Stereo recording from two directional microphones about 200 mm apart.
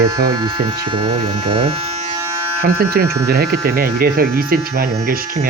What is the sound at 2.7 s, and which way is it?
Speech, 50° right (ahead or behind).